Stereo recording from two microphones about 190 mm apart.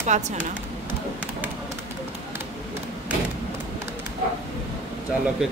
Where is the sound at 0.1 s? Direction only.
40° right (ahead or behind).